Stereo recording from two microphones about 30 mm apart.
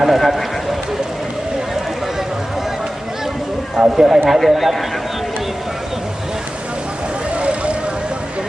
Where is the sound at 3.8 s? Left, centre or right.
Right.